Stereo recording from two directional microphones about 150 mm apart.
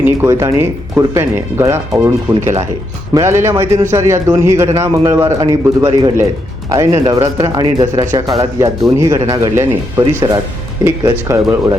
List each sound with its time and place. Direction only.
0.0 s speech: 15° right (ahead or behind)
3.2 s speech: 15° right (ahead or behind)